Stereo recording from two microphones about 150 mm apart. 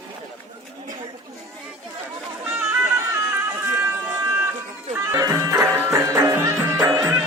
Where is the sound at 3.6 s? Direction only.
15° right (ahead or behind).